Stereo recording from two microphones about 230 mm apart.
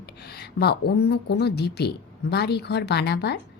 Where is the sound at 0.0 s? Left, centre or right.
Left.